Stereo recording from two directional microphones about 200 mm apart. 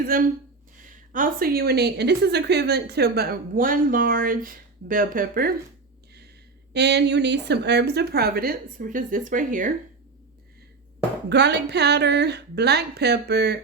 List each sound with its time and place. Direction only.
0.0 s a woman's voice: 45° right (ahead or behind)
6.7 s a woman's voice: 60° right (ahead or behind); by 9.7 s 40° right (ahead or behind)
11.3 s speech: 60° right (ahead or behind)